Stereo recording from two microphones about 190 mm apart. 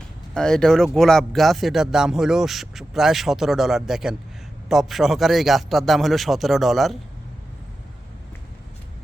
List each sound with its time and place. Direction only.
0.3 s speech: 5° left (ahead or behind)